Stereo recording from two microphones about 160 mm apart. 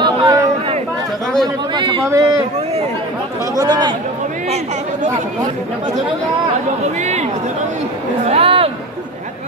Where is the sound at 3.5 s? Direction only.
25° right (ahead or behind).